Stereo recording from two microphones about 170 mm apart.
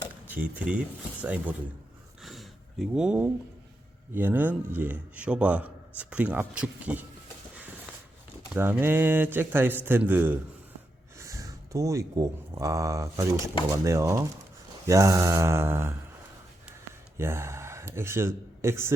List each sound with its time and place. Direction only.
0.3 s a man's voice: 10° right (ahead or behind)
2.2 s a sound: centre (ahead or behind)
4.1 s a man's voice: 10° right (ahead or behind)
8.5 s a man's voice: 10° right (ahead or behind)
17.2 s speech: 15° right (ahead or behind)